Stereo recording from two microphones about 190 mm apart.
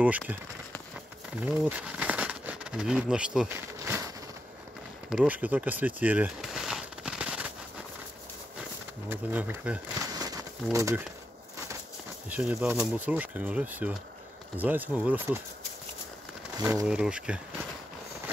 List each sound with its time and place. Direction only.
0.0 s speech: 10° right (ahead or behind)
1.4 s a sound: 5° right (ahead or behind)
5.1 s a sound: 10° right (ahead or behind)
9.1 s speech: 10° right (ahead or behind)
12.3 s speech: 10° right (ahead or behind)
16.5 s speech: 15° right (ahead or behind)
16.8 s speech: 5° right (ahead or behind)